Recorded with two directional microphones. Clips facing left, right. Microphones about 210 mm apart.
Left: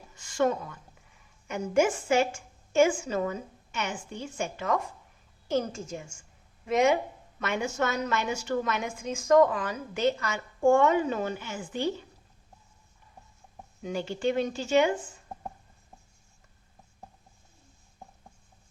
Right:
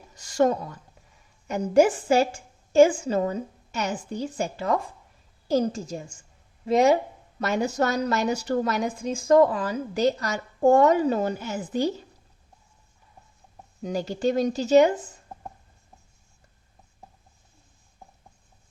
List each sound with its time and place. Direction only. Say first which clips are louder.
0.1 s a woman's voice: right 5 dB; 40° right (ahead or behind)
13.8 s a woman's voice: right 4 dB; 40° right (ahead or behind)